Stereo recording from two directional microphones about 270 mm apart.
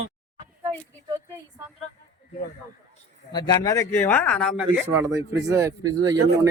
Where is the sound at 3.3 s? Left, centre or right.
Centre.